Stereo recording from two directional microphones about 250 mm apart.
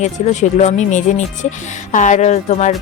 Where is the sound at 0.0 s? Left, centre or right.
Left.